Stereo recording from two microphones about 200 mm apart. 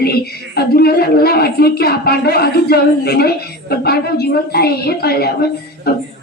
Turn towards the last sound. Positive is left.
turn(degrees=50)  # may be behind; listen again after turning